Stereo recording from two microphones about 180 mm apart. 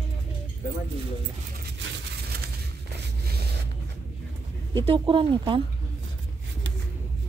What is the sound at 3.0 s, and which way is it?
Zipper, 60° right (ahead or behind).